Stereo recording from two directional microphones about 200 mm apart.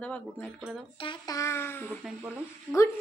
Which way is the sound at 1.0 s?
20° left (ahead or behind).